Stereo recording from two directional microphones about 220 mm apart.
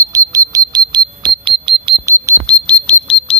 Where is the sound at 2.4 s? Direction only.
5° left (ahead or behind).